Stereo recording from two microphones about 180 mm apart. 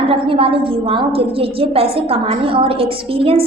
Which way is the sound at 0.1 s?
30° right (ahead or behind).